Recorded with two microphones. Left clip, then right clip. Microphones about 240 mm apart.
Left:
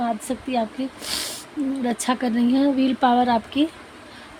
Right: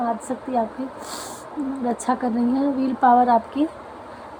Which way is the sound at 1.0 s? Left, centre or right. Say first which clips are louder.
Left 4 dB; left.